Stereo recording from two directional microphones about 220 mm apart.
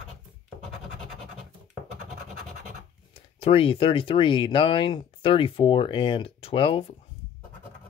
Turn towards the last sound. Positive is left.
turn(degrees=25)  # may be behind; listen again after turning